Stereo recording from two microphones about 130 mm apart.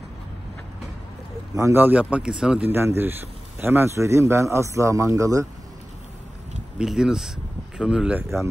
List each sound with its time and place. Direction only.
1.5 s a man's voice: 20° right (ahead or behind); by 2.7 s 5° right (ahead or behind)
2.7 s a man's voice: 20° right (ahead or behind)
6.8 s a man's voice: 5° right (ahead or behind)